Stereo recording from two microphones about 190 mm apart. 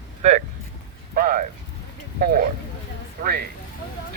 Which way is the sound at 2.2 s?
50° right (ahead or behind).